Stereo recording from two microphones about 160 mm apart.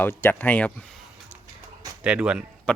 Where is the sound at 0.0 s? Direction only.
15° left (ahead or behind).